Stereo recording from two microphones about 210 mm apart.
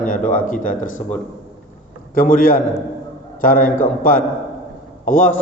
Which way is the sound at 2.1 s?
40° left (ahead or behind).